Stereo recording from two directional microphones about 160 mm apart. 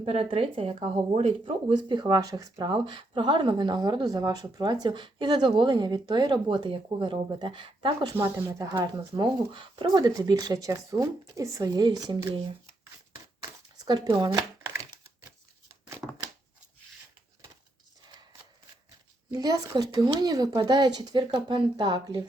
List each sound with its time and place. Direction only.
0.0 s speech: 40° right (ahead or behind)
1.7 s speech: 30° right (ahead or behind)
8.1 s speech: 15° right (ahead or behind)
13.7 s speech: 25° right (ahead or behind)
16.0 s a sound: 5° right (ahead or behind)
19.3 s speech: 25° right (ahead or behind)